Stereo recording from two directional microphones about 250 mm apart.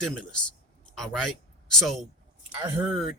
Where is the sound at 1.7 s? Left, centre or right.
Centre.